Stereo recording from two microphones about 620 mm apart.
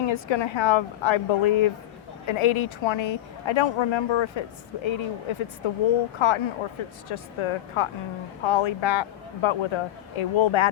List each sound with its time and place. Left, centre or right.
0.1 s a woman's voice: left